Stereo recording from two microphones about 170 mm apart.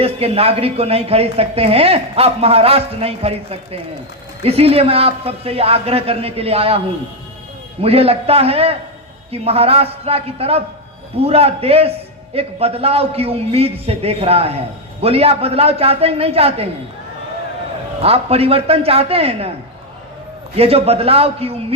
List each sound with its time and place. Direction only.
0.0 s a woman's voice: 35° right (ahead or behind)
18.0 s a woman's voice: 35° right (ahead or behind)
20.6 s a woman's voice: 35° right (ahead or behind)